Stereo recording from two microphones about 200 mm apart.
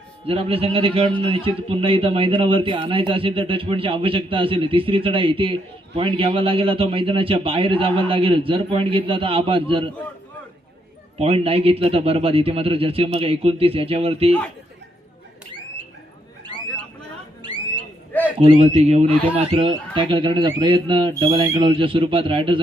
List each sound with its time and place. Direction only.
0.3 s a man's voice: 30° right (ahead or behind)
11.2 s a man's voice: 30° right (ahead or behind)
18.3 s a man's voice: 30° right (ahead or behind)